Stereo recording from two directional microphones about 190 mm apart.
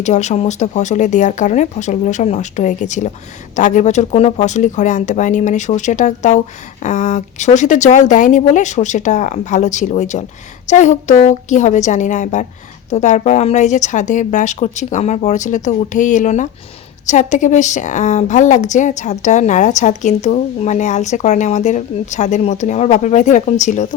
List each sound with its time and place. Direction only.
0.0 s a woman's voice: 35° left (ahead or behind)